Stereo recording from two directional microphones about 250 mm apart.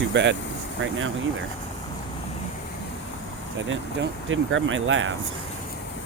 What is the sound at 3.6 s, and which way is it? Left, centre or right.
Speech, right.